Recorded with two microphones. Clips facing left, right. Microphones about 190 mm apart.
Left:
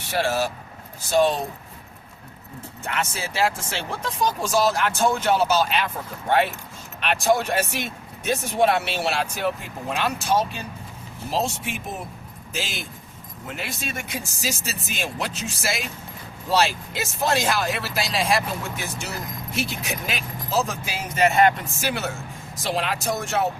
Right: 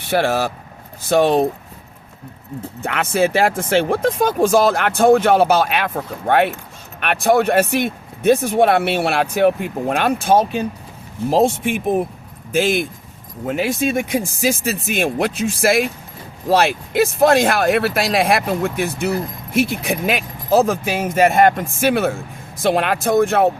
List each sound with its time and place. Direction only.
0.0 s speech: 60° right (ahead or behind)
2.8 s speech: 60° right (ahead or behind)